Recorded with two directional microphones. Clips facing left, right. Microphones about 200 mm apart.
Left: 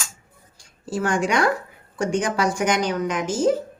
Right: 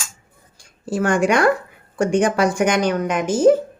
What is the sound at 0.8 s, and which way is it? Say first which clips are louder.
Speech: right 5 dB; 60° right (ahead or behind).